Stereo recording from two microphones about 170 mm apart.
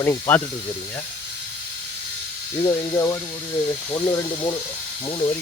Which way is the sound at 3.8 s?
15° left (ahead or behind).